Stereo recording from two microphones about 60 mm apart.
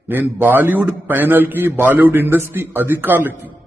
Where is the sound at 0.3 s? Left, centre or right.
Right.